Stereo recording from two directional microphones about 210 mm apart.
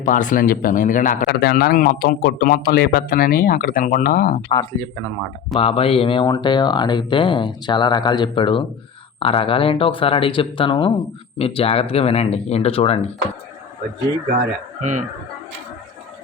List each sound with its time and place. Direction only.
0.0 s a man's voice: 40° left (ahead or behind)
4.4 s speech: 15° left (ahead or behind)
5.5 s speech: 25° left (ahead or behind)
14.8 s speech: 35° right (ahead or behind)